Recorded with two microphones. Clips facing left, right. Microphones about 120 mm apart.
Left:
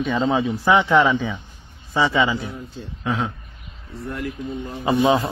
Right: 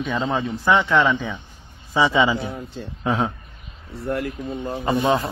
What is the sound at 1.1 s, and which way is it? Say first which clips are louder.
Speech: left 2 dB; centre (ahead or behind).